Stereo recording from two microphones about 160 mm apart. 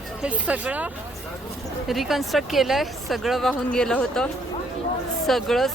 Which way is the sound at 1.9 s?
Centre (ahead or behind).